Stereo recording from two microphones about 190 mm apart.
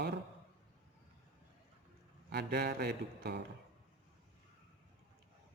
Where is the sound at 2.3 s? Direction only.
60° right (ahead or behind).